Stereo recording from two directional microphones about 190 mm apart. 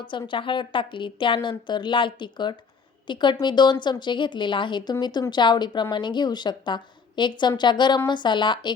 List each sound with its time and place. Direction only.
0.0 s a woman's voice: 25° left (ahead or behind)